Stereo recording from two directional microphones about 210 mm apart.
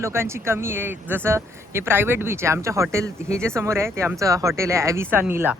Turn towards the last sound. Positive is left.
turn(degrees=-10)  # may be behind; listen again after turning